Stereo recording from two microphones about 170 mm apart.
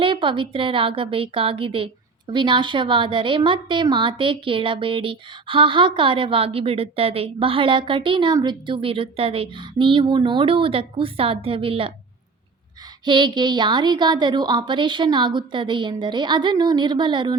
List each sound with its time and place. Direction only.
0.0 s a woman's voice: 30° right (ahead or behind)
13.1 s a woman's voice: 25° right (ahead or behind)